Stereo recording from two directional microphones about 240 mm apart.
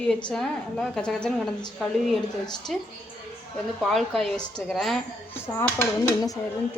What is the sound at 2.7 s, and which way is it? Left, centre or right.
A woman's voice, centre.